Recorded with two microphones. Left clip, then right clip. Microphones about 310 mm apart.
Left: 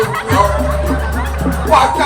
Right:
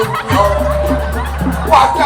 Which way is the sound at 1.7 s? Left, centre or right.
Right.